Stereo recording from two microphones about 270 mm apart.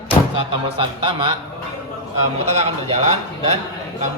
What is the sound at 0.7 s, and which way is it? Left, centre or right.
Speech, centre.